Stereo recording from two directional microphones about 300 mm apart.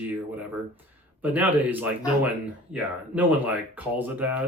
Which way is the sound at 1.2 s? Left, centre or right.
Centre.